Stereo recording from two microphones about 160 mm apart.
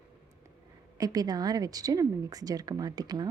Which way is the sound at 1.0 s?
25° right (ahead or behind).